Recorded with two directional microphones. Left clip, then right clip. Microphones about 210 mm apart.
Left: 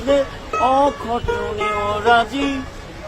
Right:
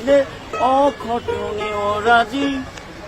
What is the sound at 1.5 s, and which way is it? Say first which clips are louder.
Music: left 2 dB; 30° left (ahead or behind).